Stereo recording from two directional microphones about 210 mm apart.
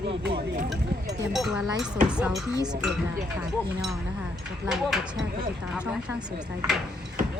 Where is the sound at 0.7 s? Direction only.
Centre (ahead or behind).